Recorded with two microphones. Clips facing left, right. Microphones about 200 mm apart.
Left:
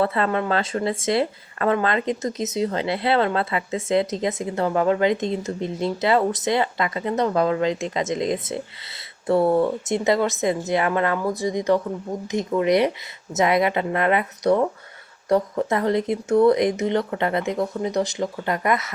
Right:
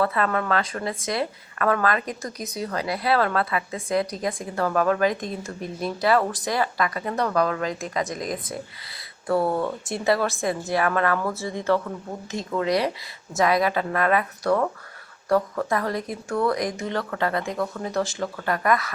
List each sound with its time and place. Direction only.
0.0 s speech: 25° left (ahead or behind)